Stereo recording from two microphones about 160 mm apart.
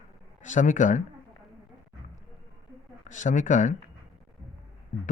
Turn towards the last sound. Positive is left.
turn(degrees=50)  # may be behind; listen again after turning